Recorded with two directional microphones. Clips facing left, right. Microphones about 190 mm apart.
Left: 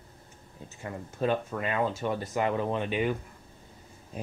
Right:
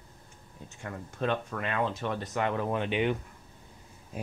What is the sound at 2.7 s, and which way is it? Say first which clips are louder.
Speech: even; 15° right (ahead or behind).